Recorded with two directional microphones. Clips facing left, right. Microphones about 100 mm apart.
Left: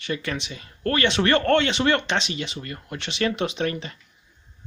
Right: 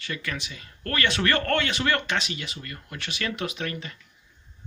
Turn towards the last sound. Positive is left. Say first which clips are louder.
# left 6 dB
turn(degrees=30)  # may be behind; listen again after turning